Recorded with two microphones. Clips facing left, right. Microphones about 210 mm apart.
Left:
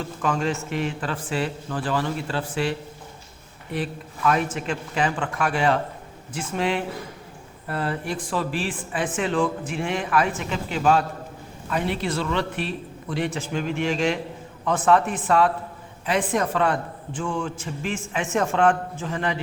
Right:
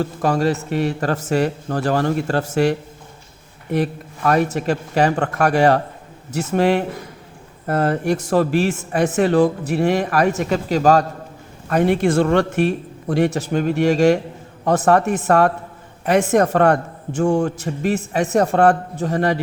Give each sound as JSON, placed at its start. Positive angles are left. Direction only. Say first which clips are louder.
{"t": 0.0, "sound": "a man's voice", "louder": "right 7 dB", "side_deg": -40}